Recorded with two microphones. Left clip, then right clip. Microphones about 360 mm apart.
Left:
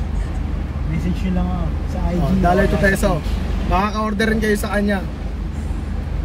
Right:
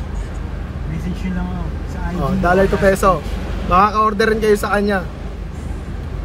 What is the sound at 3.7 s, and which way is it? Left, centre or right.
Speech, right.